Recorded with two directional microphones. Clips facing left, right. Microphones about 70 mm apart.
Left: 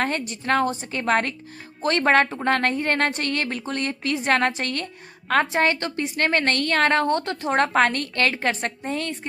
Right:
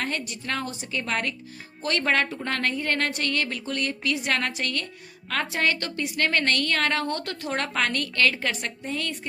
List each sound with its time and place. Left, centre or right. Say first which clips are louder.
0.0 s a woman's voice: left 5 dB; left